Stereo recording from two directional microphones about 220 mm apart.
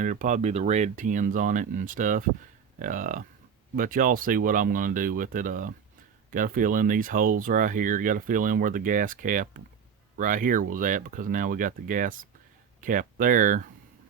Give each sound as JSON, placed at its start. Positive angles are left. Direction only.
{"t": 0.0, "sound": "speech", "side_deg": -35}